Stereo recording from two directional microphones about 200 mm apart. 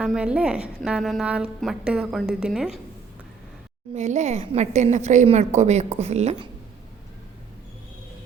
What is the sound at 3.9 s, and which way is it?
A woman's voice, 35° right (ahead or behind).